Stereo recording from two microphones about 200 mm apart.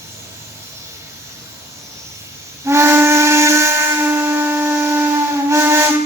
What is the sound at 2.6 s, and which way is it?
Steam whistle, 15° right (ahead or behind).